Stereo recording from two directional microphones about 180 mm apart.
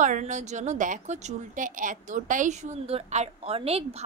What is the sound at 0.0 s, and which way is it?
A woman's voice, 45° right (ahead or behind).